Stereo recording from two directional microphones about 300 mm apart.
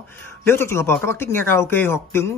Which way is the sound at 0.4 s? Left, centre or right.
Centre.